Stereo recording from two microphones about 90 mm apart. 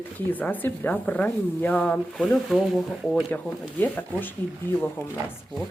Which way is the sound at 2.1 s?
Centre (ahead or behind).